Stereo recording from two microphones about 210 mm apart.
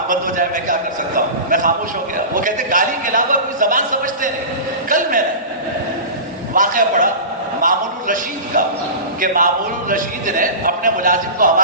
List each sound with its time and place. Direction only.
0.1 s a man's voice: 40° right (ahead or behind)
6.5 s a man's voice: 40° right (ahead or behind)